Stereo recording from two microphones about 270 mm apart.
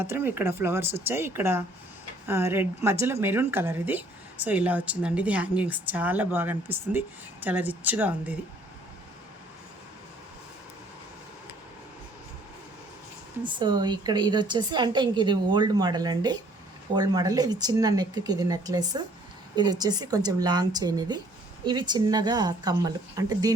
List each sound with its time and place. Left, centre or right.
0.0 s a woman's voice: centre
13.4 s a woman's voice: centre